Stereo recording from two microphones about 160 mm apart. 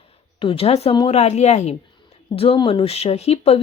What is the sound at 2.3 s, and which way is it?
Speech, 35° left (ahead or behind).